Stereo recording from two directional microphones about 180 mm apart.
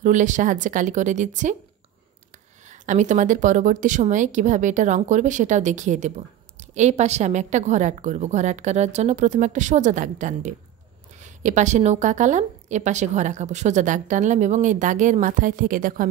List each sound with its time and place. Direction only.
0.0 s a woman's voice: 45° right (ahead or behind)
2.7 s a woman's voice: 40° right (ahead or behind)